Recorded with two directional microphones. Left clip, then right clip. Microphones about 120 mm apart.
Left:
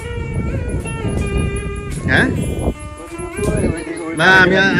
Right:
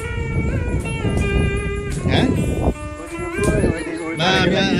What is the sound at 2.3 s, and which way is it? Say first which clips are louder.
Music: right 1 dB; 35° right (ahead or behind).